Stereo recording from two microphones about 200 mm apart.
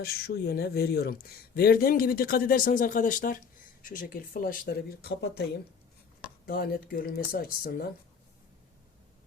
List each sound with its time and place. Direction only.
0.0 s speech: 50° left (ahead or behind)
6.4 s speech: 50° left (ahead or behind)